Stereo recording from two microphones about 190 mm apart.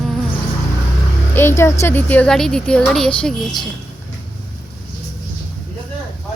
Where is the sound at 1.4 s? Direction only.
15° left (ahead or behind).